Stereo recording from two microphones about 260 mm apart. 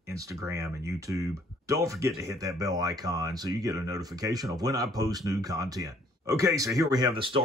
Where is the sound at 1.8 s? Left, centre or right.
Centre.